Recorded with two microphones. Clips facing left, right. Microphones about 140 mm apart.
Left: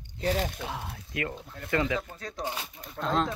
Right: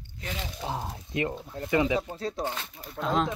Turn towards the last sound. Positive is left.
turn(degrees=-5)  # may be behind; listen again after turning